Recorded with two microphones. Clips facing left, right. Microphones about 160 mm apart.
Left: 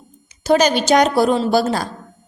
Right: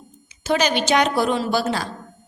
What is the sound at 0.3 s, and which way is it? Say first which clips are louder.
A woman's voice: left 6 dB; 40° left (ahead or behind).